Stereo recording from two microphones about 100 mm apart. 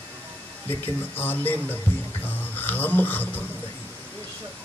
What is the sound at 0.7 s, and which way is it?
A man's voice, 20° left (ahead or behind).